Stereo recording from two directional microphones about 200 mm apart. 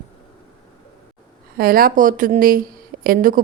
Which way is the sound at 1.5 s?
45° right (ahead or behind).